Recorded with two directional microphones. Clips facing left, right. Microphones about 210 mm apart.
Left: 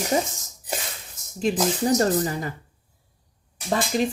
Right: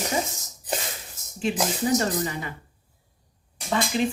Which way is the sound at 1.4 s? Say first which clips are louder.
Left 3 dB; 40° left (ahead or behind).